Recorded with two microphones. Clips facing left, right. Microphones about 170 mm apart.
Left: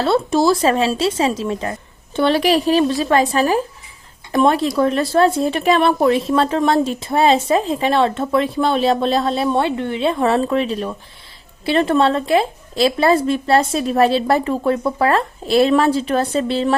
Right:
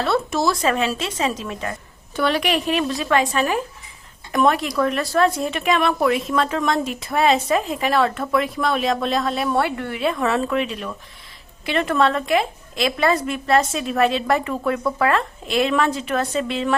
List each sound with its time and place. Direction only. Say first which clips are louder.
0.0 s a woman's voice: left 5 dB; 30° left (ahead or behind)